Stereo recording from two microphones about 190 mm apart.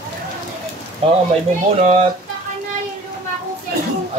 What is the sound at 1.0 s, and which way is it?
Speech, 30° right (ahead or behind).